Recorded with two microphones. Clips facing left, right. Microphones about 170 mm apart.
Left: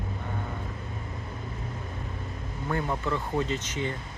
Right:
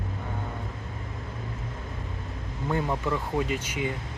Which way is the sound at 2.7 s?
15° right (ahead or behind).